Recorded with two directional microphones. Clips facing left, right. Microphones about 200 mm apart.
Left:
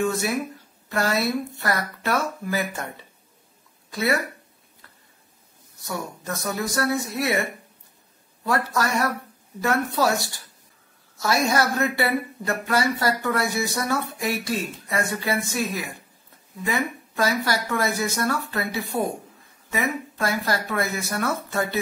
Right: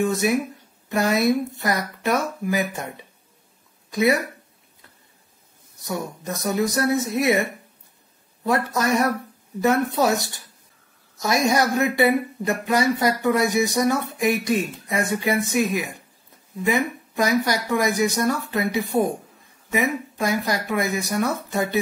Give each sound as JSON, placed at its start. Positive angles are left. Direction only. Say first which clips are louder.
{"t": 0.0, "sound": "speech", "louder": "right 3 dB", "side_deg": -15}
{"t": 3.9, "sound": "speech", "louder": "right 4 dB", "side_deg": -15}
{"t": 5.8, "sound": "speech", "louder": "right 3 dB", "side_deg": -15}
{"t": 8.5, "sound": "speech", "louder": "right 3 dB", "side_deg": -20}